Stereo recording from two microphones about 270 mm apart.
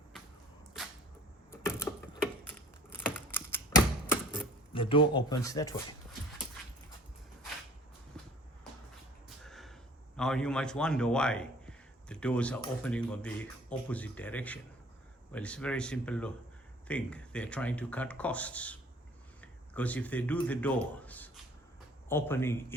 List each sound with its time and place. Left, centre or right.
1.5 s a sound: centre
2.5 s typewriter: centre
4.7 s speech: centre
8.1 s vehicle: centre
9.4 s a sound: centre
10.2 s a man's voice: centre